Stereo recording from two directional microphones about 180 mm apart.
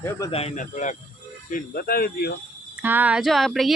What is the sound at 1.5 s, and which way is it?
Speech, 55° left (ahead or behind).